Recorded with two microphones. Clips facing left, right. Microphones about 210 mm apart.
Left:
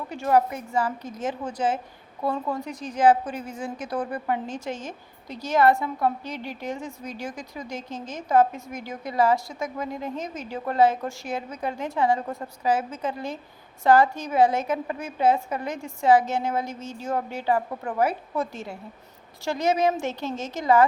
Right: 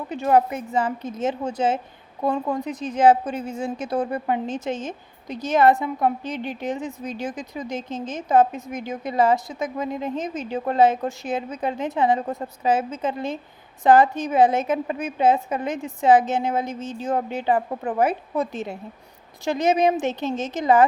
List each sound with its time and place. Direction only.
0.1 s a woman's voice: 20° right (ahead or behind)